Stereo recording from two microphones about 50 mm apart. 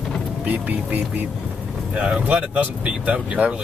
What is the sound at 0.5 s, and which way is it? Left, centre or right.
Speech, right.